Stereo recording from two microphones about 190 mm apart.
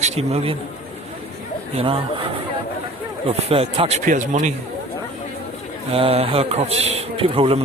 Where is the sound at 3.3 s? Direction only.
30° right (ahead or behind).